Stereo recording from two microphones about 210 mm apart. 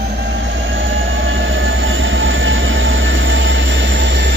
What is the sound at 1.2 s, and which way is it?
Train, 70° right (ahead or behind).